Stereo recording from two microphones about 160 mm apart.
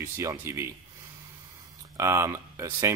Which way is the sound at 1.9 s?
20° right (ahead or behind).